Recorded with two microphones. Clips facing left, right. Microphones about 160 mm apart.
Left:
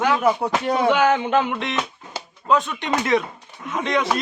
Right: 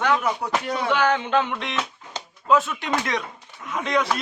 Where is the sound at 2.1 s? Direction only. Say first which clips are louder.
Left 2 dB; 10° left (ahead or behind).